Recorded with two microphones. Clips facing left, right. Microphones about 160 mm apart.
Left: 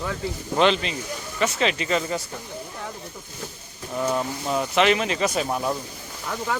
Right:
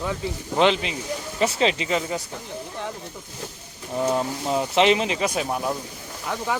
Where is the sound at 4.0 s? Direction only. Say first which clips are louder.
Right 2 dB; 20° right (ahead or behind).